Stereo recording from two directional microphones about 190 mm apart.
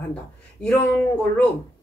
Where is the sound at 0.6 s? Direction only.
5° left (ahead or behind).